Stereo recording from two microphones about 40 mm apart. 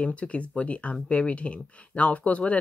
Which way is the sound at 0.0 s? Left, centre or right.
Left.